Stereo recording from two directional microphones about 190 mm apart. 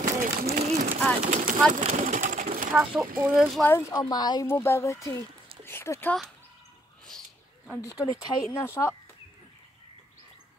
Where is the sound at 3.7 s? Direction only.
20° left (ahead or behind).